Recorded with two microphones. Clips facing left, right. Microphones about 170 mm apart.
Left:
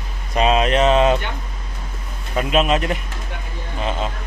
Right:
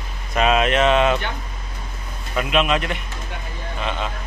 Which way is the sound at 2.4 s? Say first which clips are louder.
Left 2 dB; 35° left (ahead or behind).